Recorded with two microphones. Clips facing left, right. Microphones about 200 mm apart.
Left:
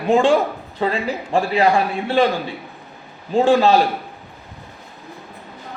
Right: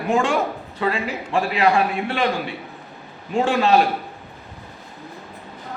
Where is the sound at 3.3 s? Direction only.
35° left (ahead or behind).